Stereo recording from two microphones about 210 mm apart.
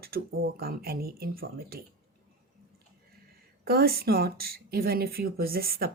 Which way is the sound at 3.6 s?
45° right (ahead or behind).